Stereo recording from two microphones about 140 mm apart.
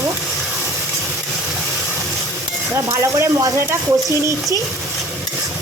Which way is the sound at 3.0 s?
20° right (ahead or behind).